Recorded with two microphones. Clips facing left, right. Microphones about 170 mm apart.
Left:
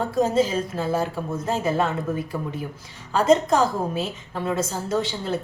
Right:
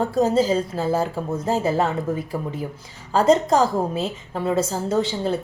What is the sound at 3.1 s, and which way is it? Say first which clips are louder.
A woman's voice: right 1 dB; 30° right (ahead or behind).